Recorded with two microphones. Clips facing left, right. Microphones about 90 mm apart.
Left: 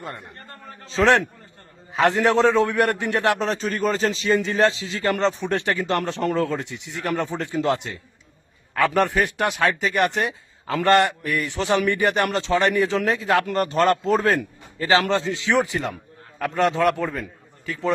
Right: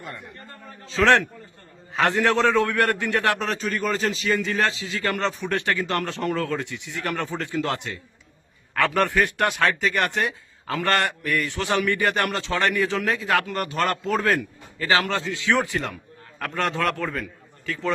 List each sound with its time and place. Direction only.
0.9 s a man's voice: 20° left (ahead or behind)
3.6 s a man's voice: 35° left (ahead or behind)
9.0 s a man's voice: 20° left (ahead or behind)